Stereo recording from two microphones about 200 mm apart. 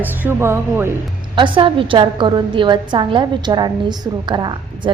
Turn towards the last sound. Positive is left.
turn(degrees=-25)  # may be behind; listen again after turning